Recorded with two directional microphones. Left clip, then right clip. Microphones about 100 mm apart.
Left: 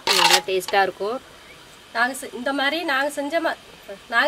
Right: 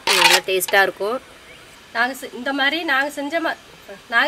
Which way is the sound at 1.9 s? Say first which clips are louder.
Right 1 dB; 5° left (ahead or behind).